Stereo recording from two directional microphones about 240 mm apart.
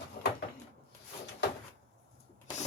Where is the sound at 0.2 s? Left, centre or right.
Left.